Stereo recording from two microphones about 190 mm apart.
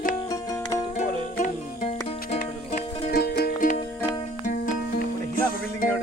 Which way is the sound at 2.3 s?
45° left (ahead or behind).